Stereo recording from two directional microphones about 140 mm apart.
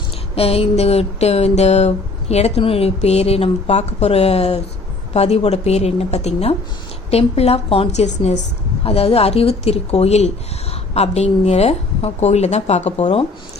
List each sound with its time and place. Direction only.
0.3 s speech: 45° left (ahead or behind)